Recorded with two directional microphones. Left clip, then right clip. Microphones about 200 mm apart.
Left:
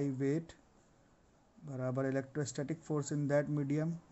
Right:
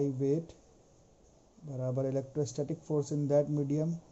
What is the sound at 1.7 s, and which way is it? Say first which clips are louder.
Speech: right 3 dB; 35° left (ahead or behind).